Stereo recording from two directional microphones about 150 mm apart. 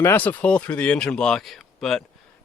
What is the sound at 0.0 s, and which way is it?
Speech, 15° left (ahead or behind).